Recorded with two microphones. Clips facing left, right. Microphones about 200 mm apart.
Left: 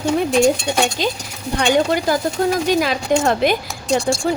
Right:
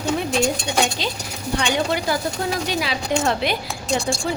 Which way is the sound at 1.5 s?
45° left (ahead or behind).